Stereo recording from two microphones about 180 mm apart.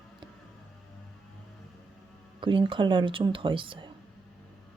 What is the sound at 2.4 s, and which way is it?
A woman's voice, 30° right (ahead or behind).